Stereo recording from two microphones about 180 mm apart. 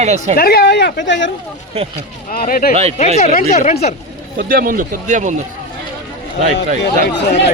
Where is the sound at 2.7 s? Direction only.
35° right (ahead or behind).